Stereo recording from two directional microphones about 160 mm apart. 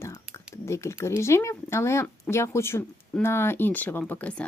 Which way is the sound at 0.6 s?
15° left (ahead or behind).